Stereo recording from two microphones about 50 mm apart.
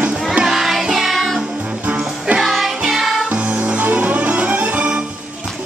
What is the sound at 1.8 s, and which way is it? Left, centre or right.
Music, right.